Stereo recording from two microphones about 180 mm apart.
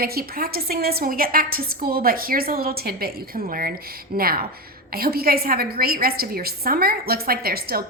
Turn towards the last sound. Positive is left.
turn(degrees=-55)  # may be behind; listen again after turning